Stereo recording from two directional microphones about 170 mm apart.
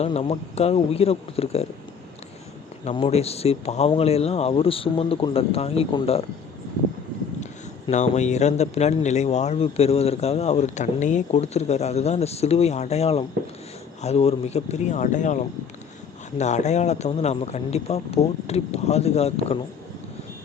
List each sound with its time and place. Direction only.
0.0 s a man's voice: 35° left (ahead or behind)
2.8 s a man's voice: 35° left (ahead or behind)
7.9 s a man's voice: 40° left (ahead or behind)